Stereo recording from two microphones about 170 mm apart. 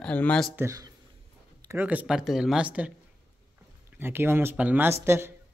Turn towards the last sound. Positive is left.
turn(degrees=-15)  # may be behind; listen again after turning